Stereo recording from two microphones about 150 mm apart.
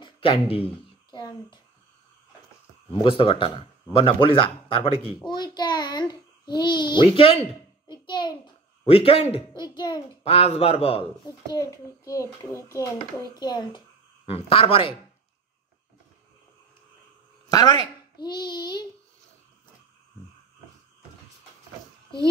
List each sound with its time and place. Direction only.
0.0 s speech: 35° left (ahead or behind)
1.1 s a sound: 30° left (ahead or behind)
2.9 s a child's voice: 35° left (ahead or behind)
8.8 s a child's voice: 40° left (ahead or behind)
9.3 s a child's voice: 30° left (ahead or behind)
10.2 s a child's voice: 40° left (ahead or behind)
11.2 s a child's voice: 25° left (ahead or behind)
17.5 s a child's voice: 25° left (ahead or behind)